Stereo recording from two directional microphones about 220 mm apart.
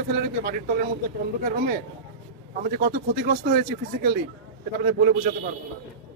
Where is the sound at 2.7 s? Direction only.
45° right (ahead or behind).